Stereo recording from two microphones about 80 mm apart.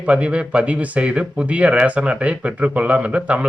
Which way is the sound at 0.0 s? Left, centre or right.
Centre.